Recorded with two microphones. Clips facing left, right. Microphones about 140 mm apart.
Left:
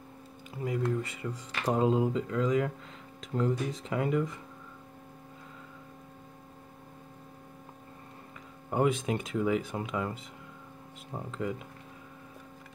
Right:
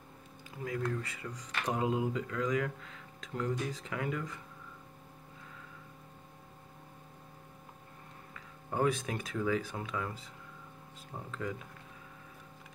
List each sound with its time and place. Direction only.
0.7 s speech: 20° left (ahead or behind)
8.6 s speech: 20° left (ahead or behind)